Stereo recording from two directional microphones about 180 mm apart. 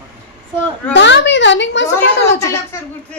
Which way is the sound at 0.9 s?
85° left.